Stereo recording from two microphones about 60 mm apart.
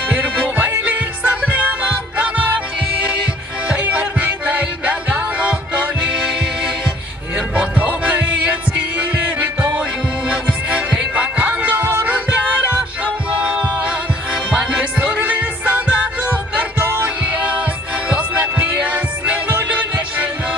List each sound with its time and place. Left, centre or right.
0.1 s music: right
3.6 s music: right
7.3 s music: right
16.8 s music: right
17.2 s music: right